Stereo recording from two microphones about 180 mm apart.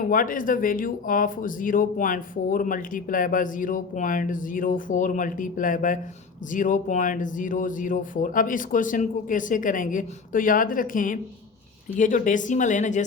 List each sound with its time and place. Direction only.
0.0 s speech: 50° left (ahead or behind)